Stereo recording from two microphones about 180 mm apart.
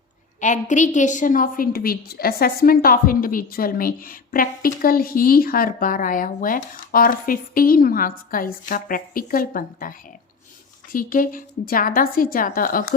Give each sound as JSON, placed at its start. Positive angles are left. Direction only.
{"t": 0.3, "sound": "a woman's voice", "side_deg": 45}
{"t": 10.9, "sound": "a woman's voice", "side_deg": 50}